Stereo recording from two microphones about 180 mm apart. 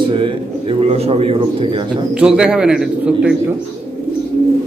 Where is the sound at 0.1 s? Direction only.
30° right (ahead or behind).